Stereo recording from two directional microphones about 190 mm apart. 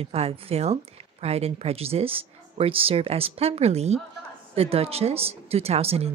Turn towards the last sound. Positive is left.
turn(degrees=-30)  # may be behind; listen again after turning